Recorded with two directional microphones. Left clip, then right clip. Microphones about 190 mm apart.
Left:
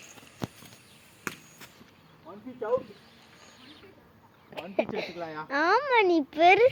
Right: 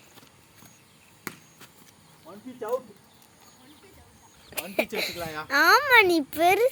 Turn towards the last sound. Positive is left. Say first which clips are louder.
# left 2 dB
turn(degrees=-5)  # may be behind; listen again after turning